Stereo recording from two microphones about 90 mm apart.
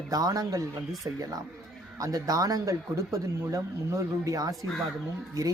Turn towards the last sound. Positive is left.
turn(degrees=-35)  # may be behind; listen again after turning